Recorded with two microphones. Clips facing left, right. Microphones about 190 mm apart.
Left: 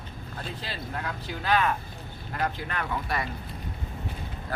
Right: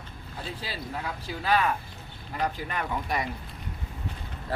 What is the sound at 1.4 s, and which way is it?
Speech, 5° right (ahead or behind).